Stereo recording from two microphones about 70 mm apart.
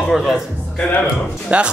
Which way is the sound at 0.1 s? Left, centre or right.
Centre.